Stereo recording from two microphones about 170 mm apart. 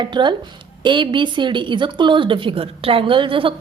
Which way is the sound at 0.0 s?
25° right (ahead or behind).